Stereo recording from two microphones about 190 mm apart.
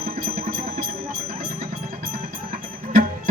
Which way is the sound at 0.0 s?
50° right (ahead or behind).